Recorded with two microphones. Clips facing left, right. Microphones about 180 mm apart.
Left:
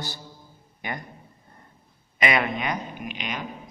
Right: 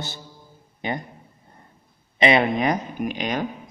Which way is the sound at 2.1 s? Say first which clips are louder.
Right 6 dB; 30° right (ahead or behind).